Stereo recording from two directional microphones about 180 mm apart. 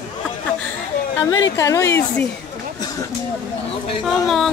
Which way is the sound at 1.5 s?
20° left (ahead or behind).